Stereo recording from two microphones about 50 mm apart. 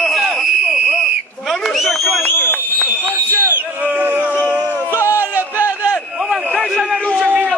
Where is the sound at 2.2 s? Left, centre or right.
Left.